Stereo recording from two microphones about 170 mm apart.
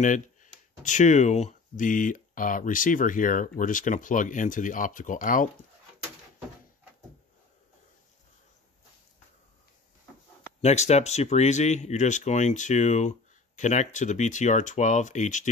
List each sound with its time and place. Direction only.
0.0 s speech: 50° left (ahead or behind)
10.6 s speech: 40° left (ahead or behind)